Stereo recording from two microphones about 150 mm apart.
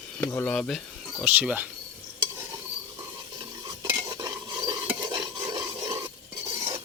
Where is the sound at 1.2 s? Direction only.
10° right (ahead or behind).